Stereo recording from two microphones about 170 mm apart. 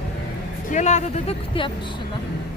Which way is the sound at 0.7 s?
45° left (ahead or behind).